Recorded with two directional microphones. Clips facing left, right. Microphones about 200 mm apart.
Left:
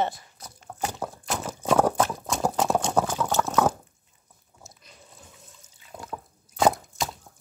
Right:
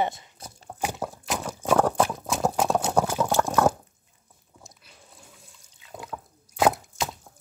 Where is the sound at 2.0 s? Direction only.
5° right (ahead or behind).